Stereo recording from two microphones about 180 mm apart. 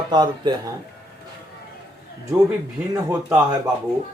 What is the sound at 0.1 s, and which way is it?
Speech, 25° right (ahead or behind).